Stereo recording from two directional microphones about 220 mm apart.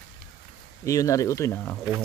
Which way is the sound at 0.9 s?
15° left (ahead or behind).